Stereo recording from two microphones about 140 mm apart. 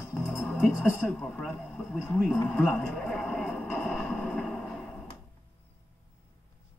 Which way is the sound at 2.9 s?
Centre (ahead or behind).